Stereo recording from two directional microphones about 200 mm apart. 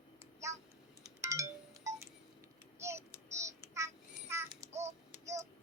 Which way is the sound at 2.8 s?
15° right (ahead or behind).